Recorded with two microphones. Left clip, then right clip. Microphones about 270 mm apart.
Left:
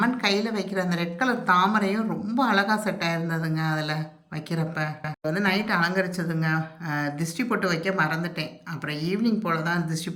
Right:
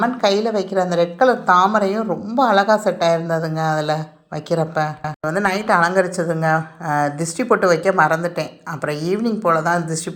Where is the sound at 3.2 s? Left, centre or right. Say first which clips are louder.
Right 9 dB; centre.